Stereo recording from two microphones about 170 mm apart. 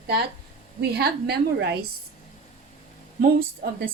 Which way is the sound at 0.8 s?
75° right (ahead or behind).